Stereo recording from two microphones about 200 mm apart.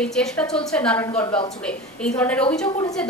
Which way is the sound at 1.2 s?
25° left (ahead or behind).